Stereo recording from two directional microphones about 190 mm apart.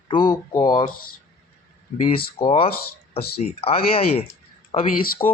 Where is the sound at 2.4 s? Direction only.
30° left (ahead or behind).